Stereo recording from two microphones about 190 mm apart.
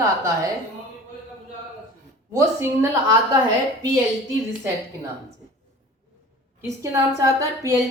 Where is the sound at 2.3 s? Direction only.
15° right (ahead or behind).